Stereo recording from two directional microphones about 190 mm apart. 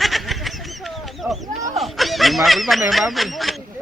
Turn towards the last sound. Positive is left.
turn(degrees=0)  # may be behind; listen again after turning